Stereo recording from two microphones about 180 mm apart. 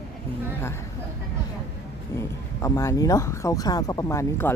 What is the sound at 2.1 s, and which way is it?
A man's voice, 15° left (ahead or behind).